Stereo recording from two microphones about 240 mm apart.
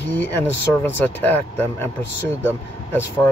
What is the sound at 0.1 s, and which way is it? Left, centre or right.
Speech, centre.